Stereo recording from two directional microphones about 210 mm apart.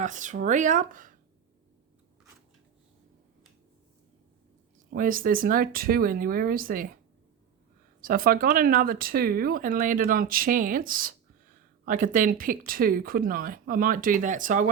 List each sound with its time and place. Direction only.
0.0 s speech: 35° right (ahead or behind)
4.9 s speech: 40° right (ahead or behind)
8.0 s speech: 45° right (ahead or behind)